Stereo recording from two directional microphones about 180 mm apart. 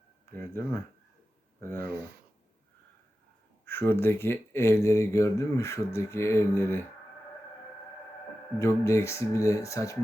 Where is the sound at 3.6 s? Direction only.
10° left (ahead or behind).